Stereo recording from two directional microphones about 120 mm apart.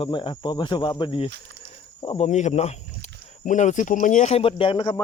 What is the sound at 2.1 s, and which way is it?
Speech, 70° left (ahead or behind).